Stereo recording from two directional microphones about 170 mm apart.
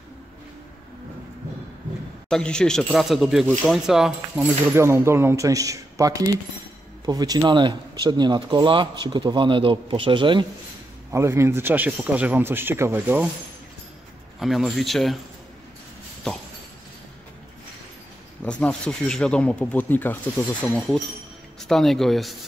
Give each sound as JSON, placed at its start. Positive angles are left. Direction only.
{"t": 2.2, "sound": "speech", "side_deg": 5}
{"t": 4.7, "sound": "speech", "side_deg": -15}
{"t": 11.1, "sound": "a man's voice", "side_deg": -15}
{"t": 14.4, "sound": "speech", "side_deg": 0}
{"t": 18.4, "sound": "speech", "side_deg": 5}